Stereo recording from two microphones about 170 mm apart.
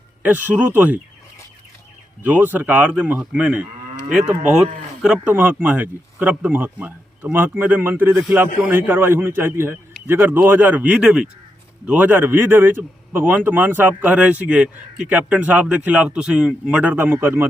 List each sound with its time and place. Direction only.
0.2 s speech: 10° right (ahead or behind)
2.2 s a man's voice: 10° right (ahead or behind)